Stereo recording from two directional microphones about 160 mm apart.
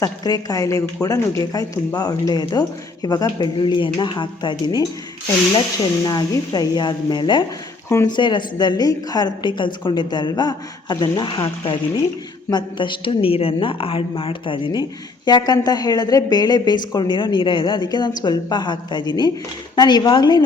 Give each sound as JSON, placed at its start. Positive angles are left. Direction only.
{"t": 0.0, "sound": "a woman's voice", "side_deg": 20}
{"t": 6.1, "sound": "a woman's voice", "side_deg": 25}